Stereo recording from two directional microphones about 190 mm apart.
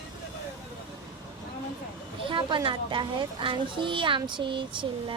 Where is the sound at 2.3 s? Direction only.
25° right (ahead or behind).